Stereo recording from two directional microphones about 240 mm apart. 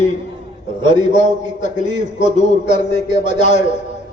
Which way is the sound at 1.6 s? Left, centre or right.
Left.